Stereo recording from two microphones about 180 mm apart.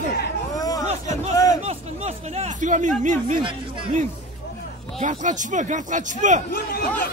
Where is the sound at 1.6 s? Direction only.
35° right (ahead or behind).